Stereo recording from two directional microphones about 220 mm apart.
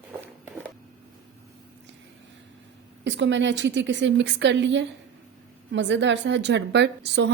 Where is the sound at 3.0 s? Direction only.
55° right (ahead or behind).